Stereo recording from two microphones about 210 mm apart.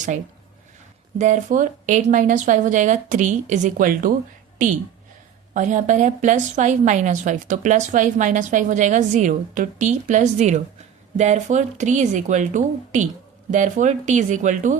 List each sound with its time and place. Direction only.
1.2 s a woman's voice: 35° right (ahead or behind)